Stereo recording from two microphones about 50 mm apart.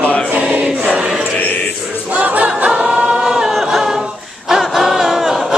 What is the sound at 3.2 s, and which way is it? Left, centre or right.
Choir, centre.